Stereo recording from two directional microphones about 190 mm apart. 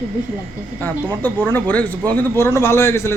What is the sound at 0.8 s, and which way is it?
Speech, 10° left (ahead or behind).